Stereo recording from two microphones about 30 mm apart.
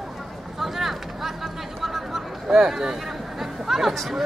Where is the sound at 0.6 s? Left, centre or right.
Centre.